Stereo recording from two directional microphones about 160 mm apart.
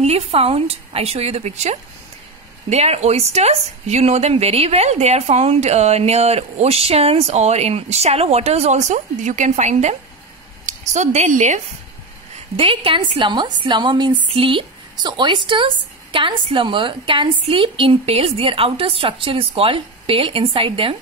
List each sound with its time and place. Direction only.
0.0 s a woman's voice: 40° right (ahead or behind)
12.5 s a woman's voice: 35° right (ahead or behind)